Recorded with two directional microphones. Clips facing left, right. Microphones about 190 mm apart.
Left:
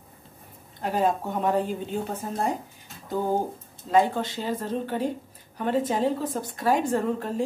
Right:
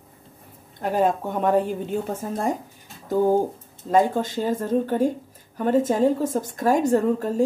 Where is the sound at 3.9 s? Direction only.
45° right (ahead or behind).